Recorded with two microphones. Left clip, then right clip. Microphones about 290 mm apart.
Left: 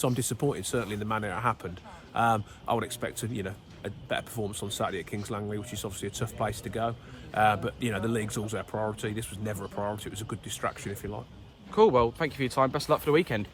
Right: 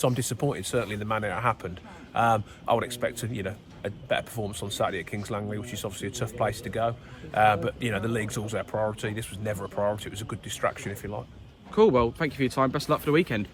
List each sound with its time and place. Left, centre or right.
0.0 s speech: centre
11.7 s speech: left